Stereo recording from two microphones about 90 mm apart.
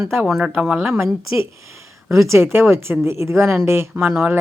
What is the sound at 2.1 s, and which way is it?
Speech, 30° right (ahead or behind).